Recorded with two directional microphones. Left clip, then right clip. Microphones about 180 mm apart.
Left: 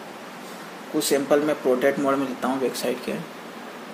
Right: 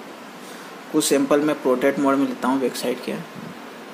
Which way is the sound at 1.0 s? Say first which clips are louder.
Right 2 dB; 20° right (ahead or behind).